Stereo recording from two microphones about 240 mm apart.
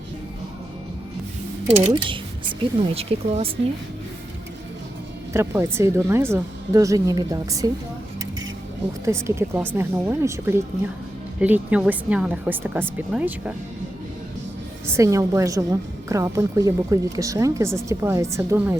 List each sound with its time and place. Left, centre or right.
1.9 s speech: centre
5.3 s a woman's voice: centre
9.0 s a woman's voice: centre
14.8 s a woman's voice: centre